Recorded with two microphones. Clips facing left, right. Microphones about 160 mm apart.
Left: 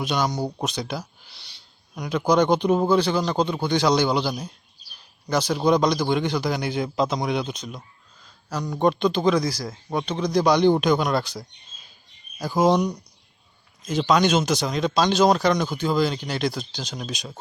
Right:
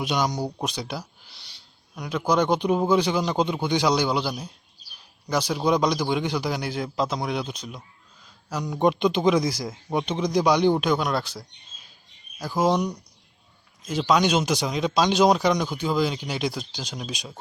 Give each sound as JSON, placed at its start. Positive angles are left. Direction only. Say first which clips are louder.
{"t": 0.0, "sound": "a man's voice", "louder": "left 1 dB", "side_deg": -15}
{"t": 8.8, "sound": "a man's voice", "louder": "even", "side_deg": -15}
{"t": 12.7, "sound": "speech", "louder": "left 3 dB", "side_deg": 10}
{"t": 13.8, "sound": "speech", "louder": "left 1 dB", "side_deg": -5}